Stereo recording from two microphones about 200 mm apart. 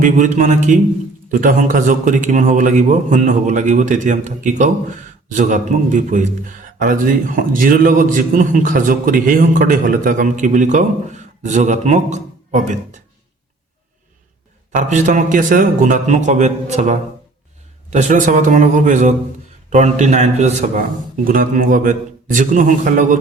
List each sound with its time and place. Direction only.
0.0 s a man's voice: 40° right (ahead or behind)
14.8 s a man's voice: 40° right (ahead or behind)